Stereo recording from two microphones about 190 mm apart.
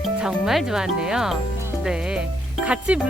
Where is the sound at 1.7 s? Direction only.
5° right (ahead or behind).